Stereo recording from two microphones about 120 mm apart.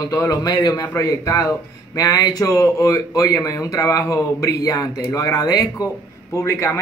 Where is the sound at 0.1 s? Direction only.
30° left (ahead or behind).